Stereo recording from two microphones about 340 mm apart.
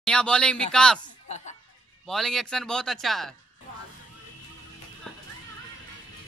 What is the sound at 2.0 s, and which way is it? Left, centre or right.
A man's voice, centre.